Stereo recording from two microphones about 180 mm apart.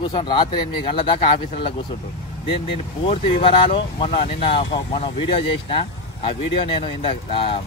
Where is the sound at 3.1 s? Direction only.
30° left (ahead or behind).